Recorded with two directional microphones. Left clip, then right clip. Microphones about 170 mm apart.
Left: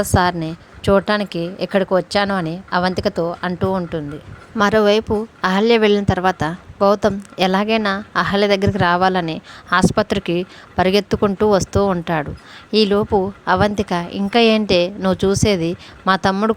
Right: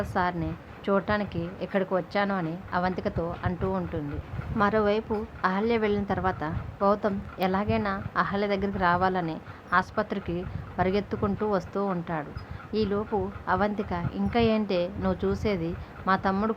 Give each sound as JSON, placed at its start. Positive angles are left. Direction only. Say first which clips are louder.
{"t": 0.0, "sound": "a woman's voice", "louder": "left 11 dB", "side_deg": 50}